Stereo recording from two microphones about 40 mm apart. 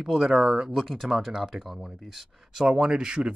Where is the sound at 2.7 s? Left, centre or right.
Centre.